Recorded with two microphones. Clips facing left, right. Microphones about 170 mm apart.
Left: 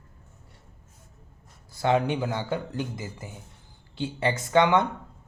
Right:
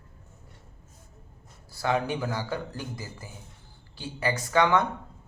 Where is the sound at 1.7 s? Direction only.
20° left (ahead or behind).